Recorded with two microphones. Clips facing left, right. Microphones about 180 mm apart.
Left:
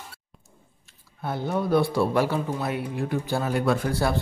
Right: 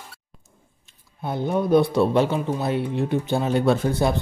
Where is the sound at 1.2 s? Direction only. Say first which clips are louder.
Right 3 dB; 20° right (ahead or behind).